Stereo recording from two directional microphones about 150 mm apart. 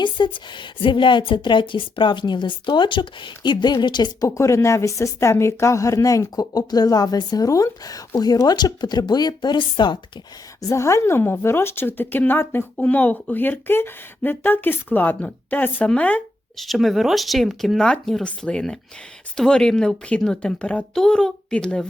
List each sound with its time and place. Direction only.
0.0 s a woman's voice: 30° left (ahead or behind)
10.6 s a woman's voice: 20° left (ahead or behind)